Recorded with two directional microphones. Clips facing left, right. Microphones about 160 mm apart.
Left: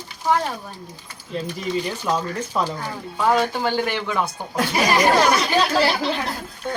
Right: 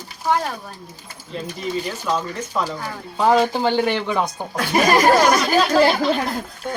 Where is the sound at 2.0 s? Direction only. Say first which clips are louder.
Even; 10° left (ahead or behind).